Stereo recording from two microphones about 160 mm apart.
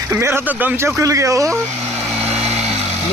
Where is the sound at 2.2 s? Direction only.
40° right (ahead or behind).